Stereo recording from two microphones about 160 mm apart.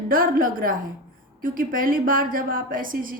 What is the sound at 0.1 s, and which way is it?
A woman's voice, 60° right (ahead or behind).